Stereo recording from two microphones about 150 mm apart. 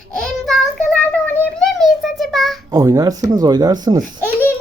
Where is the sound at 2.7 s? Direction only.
25° right (ahead or behind).